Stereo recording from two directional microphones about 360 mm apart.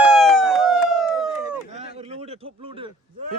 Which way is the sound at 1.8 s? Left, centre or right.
Centre.